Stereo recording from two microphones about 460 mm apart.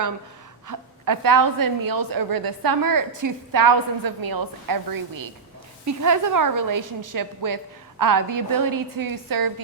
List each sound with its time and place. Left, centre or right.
0.7 s a woman's voice: right